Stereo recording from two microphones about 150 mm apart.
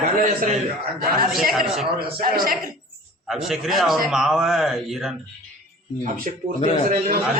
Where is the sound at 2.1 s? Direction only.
75° right (ahead or behind).